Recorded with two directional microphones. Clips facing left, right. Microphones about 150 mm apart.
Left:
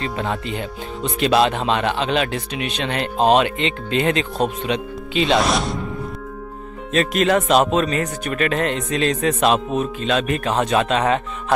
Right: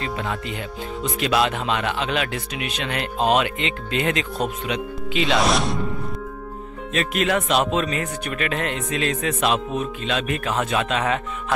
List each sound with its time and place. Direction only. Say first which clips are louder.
0.0 s speech: left 3 dB; 30° left (ahead or behind)
5.4 s speech: left 1 dB; centre (ahead or behind)
6.9 s speech: left 5 dB; 35° left (ahead or behind)